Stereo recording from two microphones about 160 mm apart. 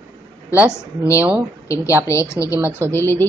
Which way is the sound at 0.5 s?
15° right (ahead or behind).